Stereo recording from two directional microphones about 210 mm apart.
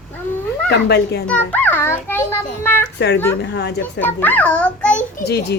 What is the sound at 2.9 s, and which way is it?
Speech, 55° left (ahead or behind).